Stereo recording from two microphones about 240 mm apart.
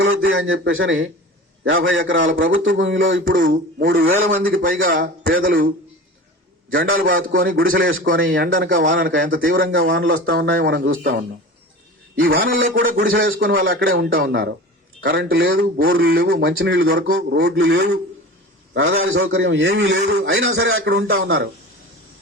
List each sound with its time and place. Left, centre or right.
0.3 s speech: right
3.2 s speech: right
4.6 s speech: right
6.7 s a man's voice: right
6.9 s speech: right
7.9 s speech: right
8.3 s speech: right
9.7 s speech: right
13.0 s speech: right
18.7 s speech: right
21.2 s speech: right